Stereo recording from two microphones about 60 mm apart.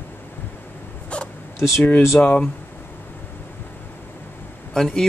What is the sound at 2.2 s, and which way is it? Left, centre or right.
Speech, left.